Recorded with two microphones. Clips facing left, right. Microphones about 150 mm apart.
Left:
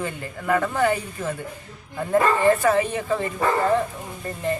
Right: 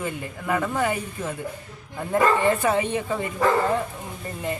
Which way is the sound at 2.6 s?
20° right (ahead or behind).